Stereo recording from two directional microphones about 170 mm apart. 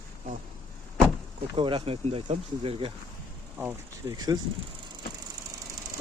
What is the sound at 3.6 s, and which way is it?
Speech, 10° right (ahead or behind).